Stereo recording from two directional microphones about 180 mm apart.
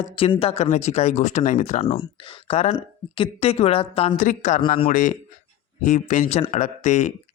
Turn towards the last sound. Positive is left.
turn(degrees=40)  # may be behind; listen again after turning